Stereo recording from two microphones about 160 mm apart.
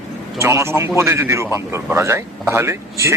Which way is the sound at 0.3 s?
15° right (ahead or behind).